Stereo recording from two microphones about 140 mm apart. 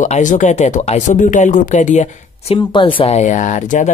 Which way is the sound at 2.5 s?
35° left (ahead or behind).